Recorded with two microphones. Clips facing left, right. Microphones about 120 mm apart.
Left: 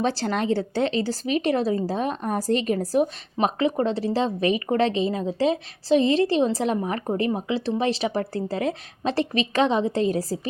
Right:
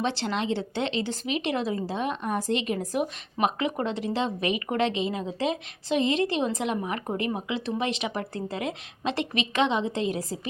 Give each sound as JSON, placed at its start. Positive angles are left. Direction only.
{"t": 0.0, "sound": "speech", "side_deg": 40}